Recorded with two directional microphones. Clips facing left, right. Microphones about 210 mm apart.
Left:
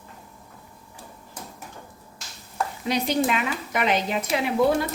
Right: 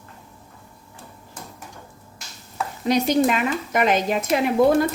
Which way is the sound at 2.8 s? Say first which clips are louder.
Right 5 dB; 45° right (ahead or behind).